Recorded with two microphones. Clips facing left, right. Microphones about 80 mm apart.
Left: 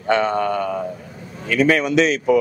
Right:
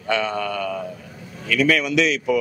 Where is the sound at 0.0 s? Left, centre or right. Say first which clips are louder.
Left 5 dB; left.